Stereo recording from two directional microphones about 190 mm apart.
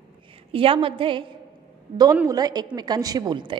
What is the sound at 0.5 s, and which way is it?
A woman's voice, 30° right (ahead or behind).